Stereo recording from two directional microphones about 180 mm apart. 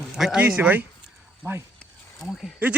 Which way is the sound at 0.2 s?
5° right (ahead or behind).